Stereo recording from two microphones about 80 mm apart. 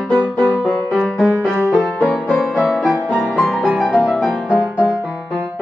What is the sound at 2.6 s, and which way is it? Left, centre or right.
Music, centre.